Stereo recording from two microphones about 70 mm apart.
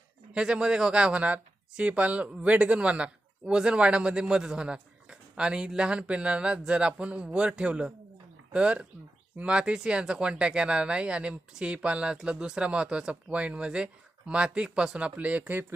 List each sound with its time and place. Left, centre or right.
0.3 s speech: centre